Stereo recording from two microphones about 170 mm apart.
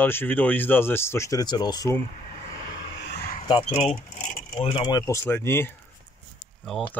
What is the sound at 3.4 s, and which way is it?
Speech, 35° left (ahead or behind).